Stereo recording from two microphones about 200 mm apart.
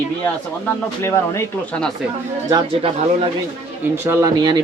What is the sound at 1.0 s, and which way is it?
Speech, 15° left (ahead or behind).